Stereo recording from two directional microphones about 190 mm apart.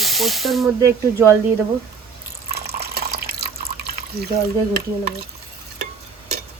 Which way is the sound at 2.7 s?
55° right (ahead or behind).